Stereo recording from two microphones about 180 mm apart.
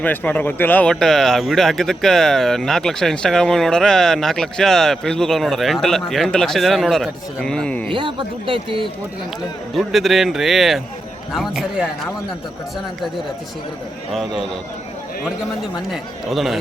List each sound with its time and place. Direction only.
0.0 s speech: 10° left (ahead or behind)
7.9 s speech: 30° right (ahead or behind)
9.7 s speech: centre (ahead or behind)
14.1 s speech: centre (ahead or behind)
15.9 s speech: centre (ahead or behind)